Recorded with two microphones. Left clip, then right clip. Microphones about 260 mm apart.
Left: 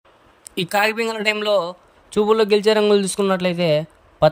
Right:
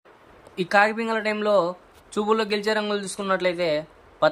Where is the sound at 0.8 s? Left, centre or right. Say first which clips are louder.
Left 1 dB; left.